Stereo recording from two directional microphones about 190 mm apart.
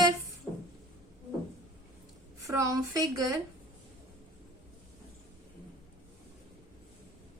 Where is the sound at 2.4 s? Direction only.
15° right (ahead or behind).